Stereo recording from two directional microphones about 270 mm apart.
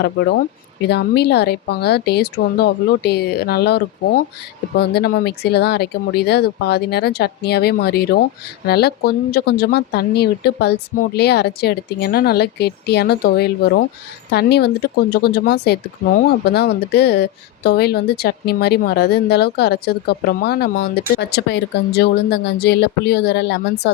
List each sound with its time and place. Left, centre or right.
0.8 s speech: left